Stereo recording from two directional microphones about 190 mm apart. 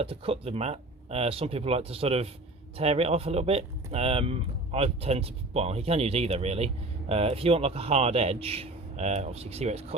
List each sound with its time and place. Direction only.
0.0 s speech: 30° right (ahead or behind)